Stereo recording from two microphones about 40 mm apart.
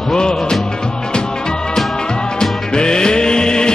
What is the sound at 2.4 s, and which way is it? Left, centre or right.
Music, left.